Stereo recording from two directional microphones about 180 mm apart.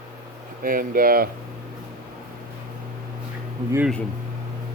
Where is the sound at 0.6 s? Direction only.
50° right (ahead or behind).